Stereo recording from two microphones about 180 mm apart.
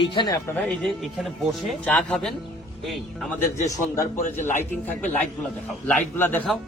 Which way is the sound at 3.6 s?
20° left (ahead or behind).